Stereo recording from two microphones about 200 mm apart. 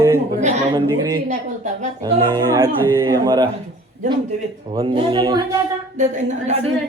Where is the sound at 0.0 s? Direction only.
10° right (ahead or behind).